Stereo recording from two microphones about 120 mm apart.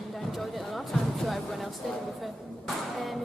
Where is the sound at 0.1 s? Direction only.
Centre (ahead or behind).